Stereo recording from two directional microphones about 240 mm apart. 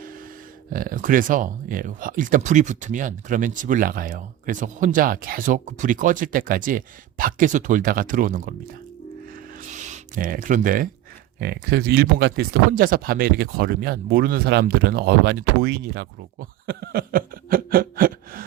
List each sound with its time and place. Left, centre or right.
0.7 s speech: right
9.3 s music: right
11.3 s speech: right